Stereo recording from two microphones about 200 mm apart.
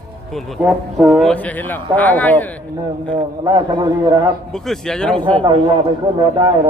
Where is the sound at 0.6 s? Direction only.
5° right (ahead or behind).